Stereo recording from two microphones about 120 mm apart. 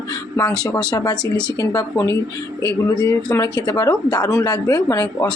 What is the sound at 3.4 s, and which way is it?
A woman's voice, 30° left (ahead or behind).